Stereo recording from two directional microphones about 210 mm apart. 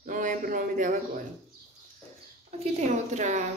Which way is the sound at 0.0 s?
40° right (ahead or behind).